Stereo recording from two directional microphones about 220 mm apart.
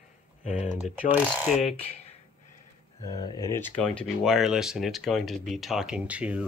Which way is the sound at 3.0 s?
20° left (ahead or behind).